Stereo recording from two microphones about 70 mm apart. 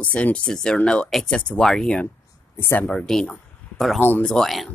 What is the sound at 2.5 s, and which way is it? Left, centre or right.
Speech, left.